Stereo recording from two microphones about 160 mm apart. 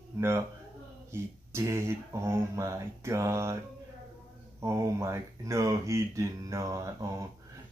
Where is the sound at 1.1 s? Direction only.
15° right (ahead or behind).